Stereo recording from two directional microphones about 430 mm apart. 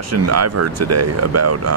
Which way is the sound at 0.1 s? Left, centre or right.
Right.